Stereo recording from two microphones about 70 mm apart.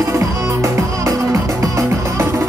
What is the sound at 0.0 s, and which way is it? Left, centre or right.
Music, right.